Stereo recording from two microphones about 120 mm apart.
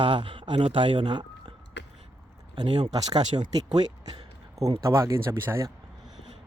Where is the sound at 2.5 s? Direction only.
40° right (ahead or behind).